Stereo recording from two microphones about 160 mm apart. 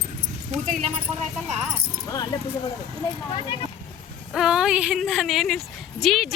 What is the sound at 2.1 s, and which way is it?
Speech, 20° left (ahead or behind).